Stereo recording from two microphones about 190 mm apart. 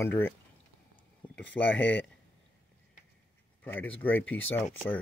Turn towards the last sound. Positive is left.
turn(degrees=10)  # may be behind; listen again after turning